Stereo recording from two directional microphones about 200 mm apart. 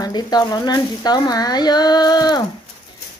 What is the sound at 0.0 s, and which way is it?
Speech, 20° left (ahead or behind).